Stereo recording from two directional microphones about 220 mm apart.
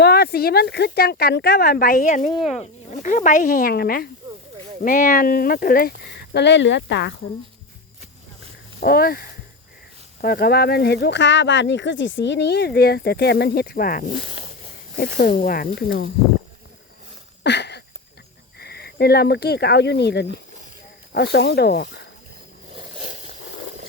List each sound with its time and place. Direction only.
0.0 s speech: 45° left (ahead or behind)
8.8 s speech: 45° left (ahead or behind)
14.1 s speech: 25° right (ahead or behind)
14.9 s speech: 40° left (ahead or behind)
17.4 s a sound: 50° left (ahead or behind)
18.6 s speech: 45° left (ahead or behind)
22.7 s a sound: 25° right (ahead or behind)